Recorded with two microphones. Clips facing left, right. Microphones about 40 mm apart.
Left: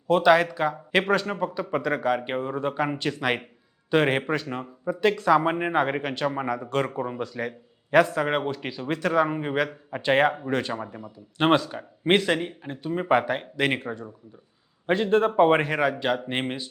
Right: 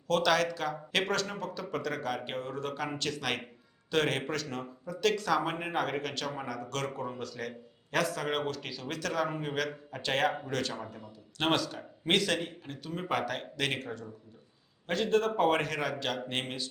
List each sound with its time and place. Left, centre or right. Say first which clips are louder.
0.1 s speech: left 8 dB; left